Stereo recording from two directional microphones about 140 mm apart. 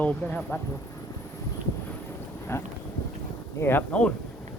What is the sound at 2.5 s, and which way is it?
Speech, 20° left (ahead or behind).